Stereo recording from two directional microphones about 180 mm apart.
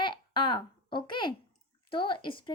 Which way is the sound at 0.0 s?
25° left (ahead or behind).